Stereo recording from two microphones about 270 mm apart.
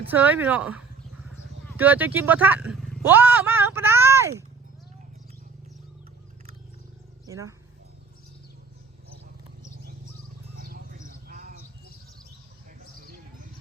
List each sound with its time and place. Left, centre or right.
0.1 s speech: centre
7.3 s speech: centre
11.3 s cricket: right